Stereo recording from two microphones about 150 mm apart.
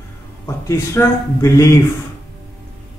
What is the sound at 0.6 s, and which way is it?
Speech, 20° left (ahead or behind).